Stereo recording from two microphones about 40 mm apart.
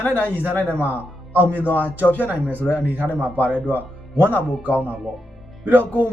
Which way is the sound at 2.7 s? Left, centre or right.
Right.